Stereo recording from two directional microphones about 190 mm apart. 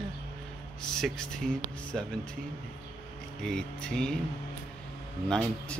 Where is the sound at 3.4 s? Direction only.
5° left (ahead or behind).